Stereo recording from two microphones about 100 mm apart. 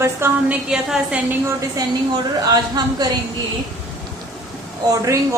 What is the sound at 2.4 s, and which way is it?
Speech, 40° right (ahead or behind).